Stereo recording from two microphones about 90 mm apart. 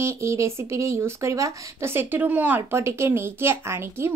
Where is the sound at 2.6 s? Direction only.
30° right (ahead or behind).